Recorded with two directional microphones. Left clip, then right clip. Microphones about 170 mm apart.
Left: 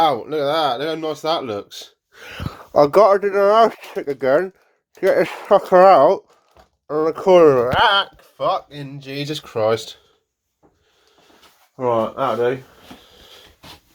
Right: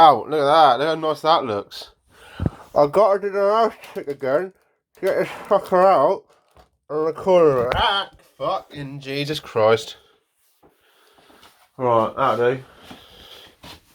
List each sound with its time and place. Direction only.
0.0 s speech: 5° left (ahead or behind)
2.1 s speech: 70° left (ahead or behind); by 8.6 s 90° left
8.7 s speech: 15° left (ahead or behind)
12.4 s a sound: 15° left (ahead or behind)